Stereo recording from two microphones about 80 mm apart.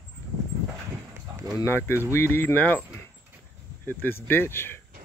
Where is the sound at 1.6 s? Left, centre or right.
Left.